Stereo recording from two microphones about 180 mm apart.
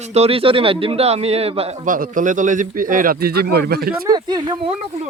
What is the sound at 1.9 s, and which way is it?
Speech, 45° right (ahead or behind).